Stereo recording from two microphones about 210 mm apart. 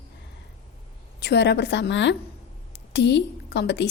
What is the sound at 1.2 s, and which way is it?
A woman's voice, 55° left (ahead or behind).